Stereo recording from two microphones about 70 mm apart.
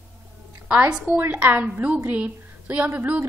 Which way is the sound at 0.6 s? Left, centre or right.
Centre.